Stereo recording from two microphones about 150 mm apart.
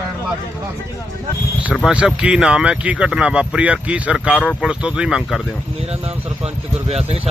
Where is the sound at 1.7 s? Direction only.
5° right (ahead or behind).